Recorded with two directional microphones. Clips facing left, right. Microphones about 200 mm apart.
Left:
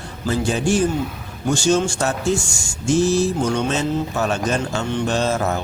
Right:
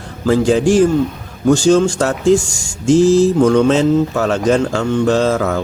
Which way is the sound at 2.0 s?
90° right.